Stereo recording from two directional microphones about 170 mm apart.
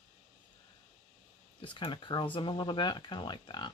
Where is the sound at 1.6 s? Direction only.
30° left (ahead or behind).